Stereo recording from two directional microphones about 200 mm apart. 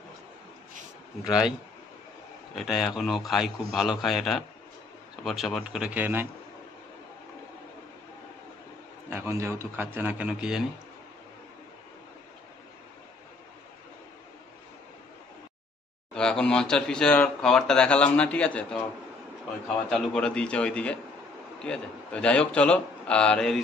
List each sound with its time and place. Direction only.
1.2 s speech: 5° right (ahead or behind)
2.5 s speech: centre (ahead or behind)
9.1 s speech: 10° right (ahead or behind)
16.2 s speech: 5° left (ahead or behind)
19.9 s speech: 5° left (ahead or behind)